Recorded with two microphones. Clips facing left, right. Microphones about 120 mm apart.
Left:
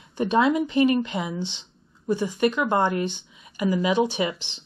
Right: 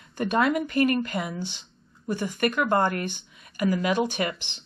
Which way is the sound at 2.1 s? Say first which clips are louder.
Left 4 dB; 10° left (ahead or behind).